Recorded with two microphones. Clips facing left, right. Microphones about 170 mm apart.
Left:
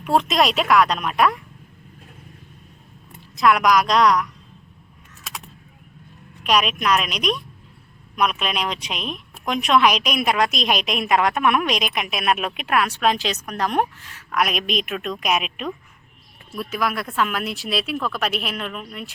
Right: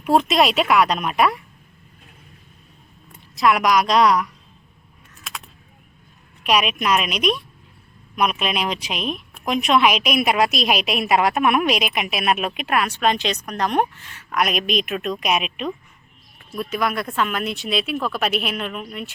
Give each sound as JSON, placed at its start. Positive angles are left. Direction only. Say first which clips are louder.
{"t": 0.0, "sound": "a woman's voice", "louder": "right 2 dB", "side_deg": -5}
{"t": 3.3, "sound": "a woman's voice", "louder": "even", "side_deg": 0}
{"t": 6.4, "sound": "a woman's voice", "louder": "even", "side_deg": -5}